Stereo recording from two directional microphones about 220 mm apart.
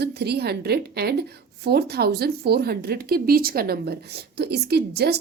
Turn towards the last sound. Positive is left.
turn(degrees=-45)  # may be behind; listen again after turning